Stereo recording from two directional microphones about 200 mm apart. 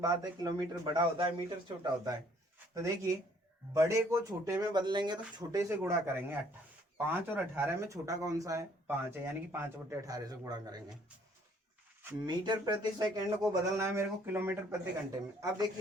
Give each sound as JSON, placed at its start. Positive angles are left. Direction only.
{"t": 0.0, "sound": "speech", "side_deg": -20}
{"t": 3.8, "sound": "speech", "side_deg": -15}
{"t": 12.2, "sound": "speech", "side_deg": -20}